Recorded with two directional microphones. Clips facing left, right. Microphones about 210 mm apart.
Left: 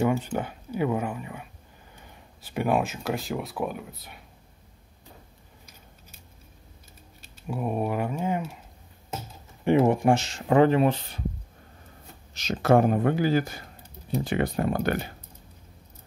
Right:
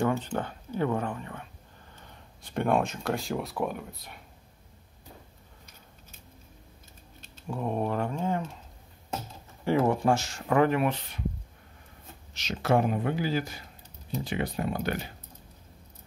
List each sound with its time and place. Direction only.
0.0 s speech: 10° left (ahead or behind)
7.2 s speech: 10° left (ahead or behind)
9.7 s speech: 20° left (ahead or behind)
12.4 s speech: 45° left (ahead or behind)